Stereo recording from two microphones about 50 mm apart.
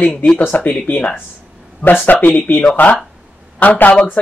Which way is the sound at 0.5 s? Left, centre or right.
Left.